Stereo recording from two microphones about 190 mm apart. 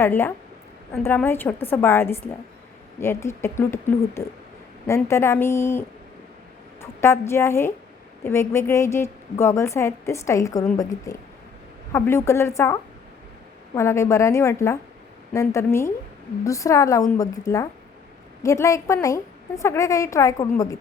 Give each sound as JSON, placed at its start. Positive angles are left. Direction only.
{"t": 0.0, "sound": "a woman's voice", "side_deg": 10}
{"t": 7.0, "sound": "a woman's voice", "side_deg": 15}